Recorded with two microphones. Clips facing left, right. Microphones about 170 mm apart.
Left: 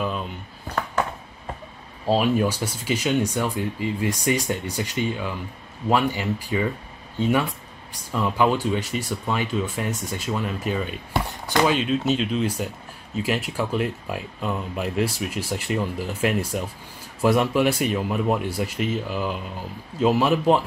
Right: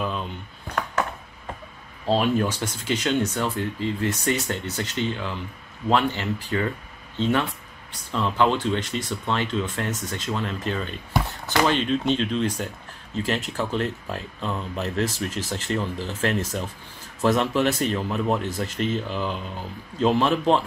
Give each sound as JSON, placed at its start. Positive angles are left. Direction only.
{"t": 2.0, "sound": "speech", "side_deg": 10}